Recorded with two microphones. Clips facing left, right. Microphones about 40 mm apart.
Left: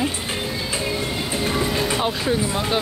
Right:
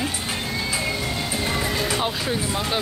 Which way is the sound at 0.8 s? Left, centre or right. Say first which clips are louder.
Left 1 dB; centre.